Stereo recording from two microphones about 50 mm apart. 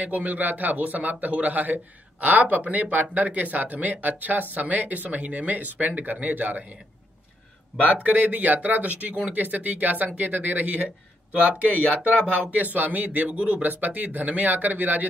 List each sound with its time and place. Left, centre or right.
0.0 s a man's voice: right
8.0 s a man's voice: right
11.6 s speech: left
12.4 s a man's voice: right